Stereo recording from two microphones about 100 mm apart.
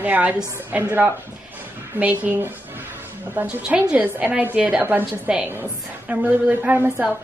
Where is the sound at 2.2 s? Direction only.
20° right (ahead or behind).